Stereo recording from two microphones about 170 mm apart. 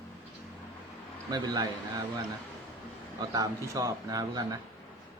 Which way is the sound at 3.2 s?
20° right (ahead or behind).